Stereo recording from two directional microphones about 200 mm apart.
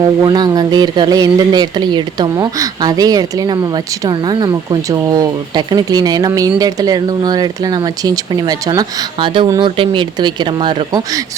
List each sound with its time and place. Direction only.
0.2 s speech: 20° right (ahead or behind)